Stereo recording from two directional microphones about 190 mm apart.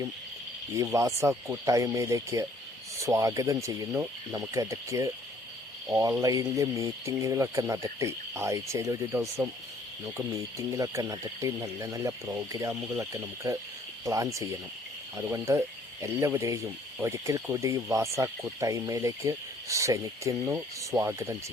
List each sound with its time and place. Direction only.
0.7 s speech: 15° right (ahead or behind)